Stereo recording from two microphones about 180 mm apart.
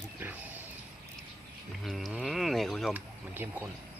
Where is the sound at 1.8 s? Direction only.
Centre (ahead or behind).